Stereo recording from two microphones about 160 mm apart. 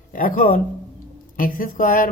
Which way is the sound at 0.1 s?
55° left (ahead or behind).